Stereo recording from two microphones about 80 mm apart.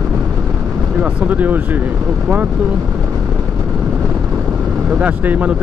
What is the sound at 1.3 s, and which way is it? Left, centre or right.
Speech, right.